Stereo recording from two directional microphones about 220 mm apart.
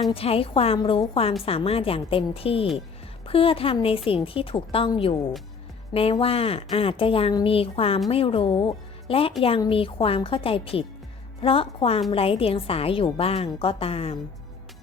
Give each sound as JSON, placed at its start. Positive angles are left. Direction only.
{"t": 0.1, "sound": "a woman's voice", "side_deg": 25}